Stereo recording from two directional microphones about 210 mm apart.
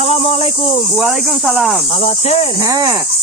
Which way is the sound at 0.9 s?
Centre (ahead or behind).